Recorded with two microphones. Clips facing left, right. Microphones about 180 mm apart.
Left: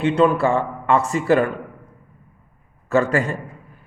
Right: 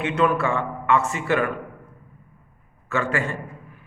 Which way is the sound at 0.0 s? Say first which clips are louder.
Left 5 dB; 30° left (ahead or behind).